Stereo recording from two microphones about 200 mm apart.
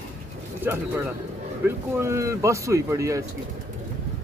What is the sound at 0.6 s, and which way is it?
Speech, 10° right (ahead or behind).